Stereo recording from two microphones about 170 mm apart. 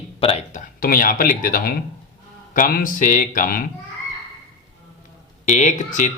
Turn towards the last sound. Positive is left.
turn(degrees=45)  # may be behind; listen again after turning